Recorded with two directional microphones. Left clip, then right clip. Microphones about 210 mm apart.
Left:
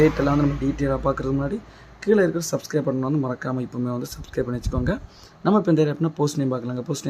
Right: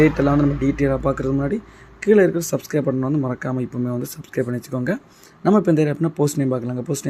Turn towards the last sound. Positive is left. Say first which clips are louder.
# right 3 dB
turn(degrees=-5)  # may be behind; listen again after turning